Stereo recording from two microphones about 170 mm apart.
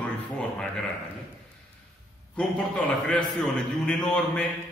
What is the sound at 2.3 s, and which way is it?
A man's voice, 5° left (ahead or behind).